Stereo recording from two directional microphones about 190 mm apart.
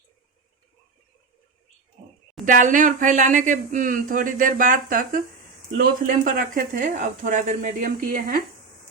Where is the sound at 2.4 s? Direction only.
45° right (ahead or behind).